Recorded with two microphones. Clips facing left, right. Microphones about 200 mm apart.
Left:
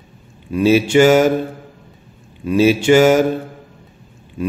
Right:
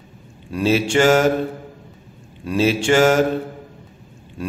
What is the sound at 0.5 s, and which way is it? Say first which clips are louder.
Speech: left 5 dB; 5° left (ahead or behind).